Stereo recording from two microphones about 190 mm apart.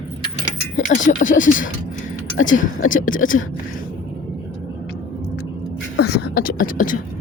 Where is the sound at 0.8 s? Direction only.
40° left (ahead or behind).